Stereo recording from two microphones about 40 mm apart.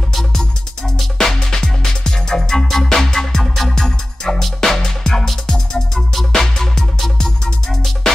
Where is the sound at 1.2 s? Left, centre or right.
Centre.